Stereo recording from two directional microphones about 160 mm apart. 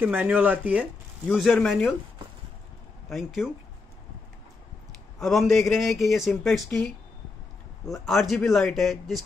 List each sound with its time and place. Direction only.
0.0 s speech: 10° right (ahead or behind)
3.1 s speech: centre (ahead or behind)
5.2 s speech: centre (ahead or behind)